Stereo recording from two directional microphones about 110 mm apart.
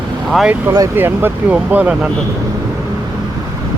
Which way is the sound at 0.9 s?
20° right (ahead or behind).